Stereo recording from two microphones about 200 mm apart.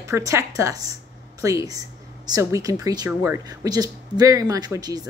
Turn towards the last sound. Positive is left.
turn(degrees=-20)  # may be behind; listen again after turning